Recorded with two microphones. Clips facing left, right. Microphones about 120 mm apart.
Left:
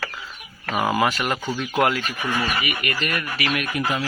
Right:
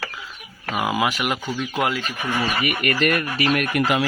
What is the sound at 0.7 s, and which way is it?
Speech, 5° right (ahead or behind).